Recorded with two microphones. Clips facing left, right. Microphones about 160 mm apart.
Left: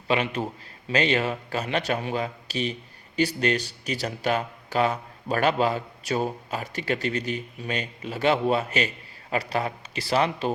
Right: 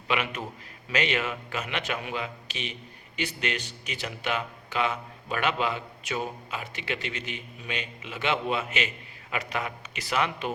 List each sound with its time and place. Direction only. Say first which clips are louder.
0.1 s speech: left 5 dB; 30° left (ahead or behind)